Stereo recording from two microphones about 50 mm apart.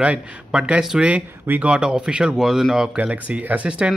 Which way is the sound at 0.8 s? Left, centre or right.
Centre.